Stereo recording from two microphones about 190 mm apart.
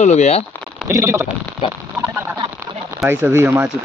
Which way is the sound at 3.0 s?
10° right (ahead or behind).